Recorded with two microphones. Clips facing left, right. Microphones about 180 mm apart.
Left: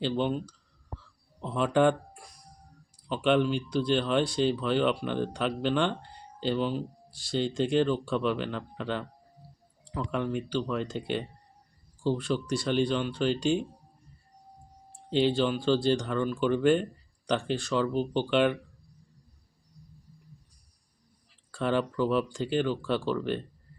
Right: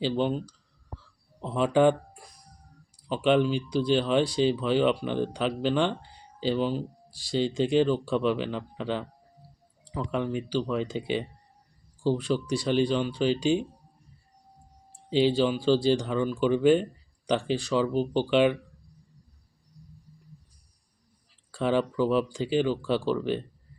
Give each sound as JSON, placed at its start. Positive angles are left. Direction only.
{"t": 0.0, "sound": "speech", "side_deg": 0}
{"t": 15.1, "sound": "speech", "side_deg": -5}
{"t": 21.5, "sound": "speech", "side_deg": 0}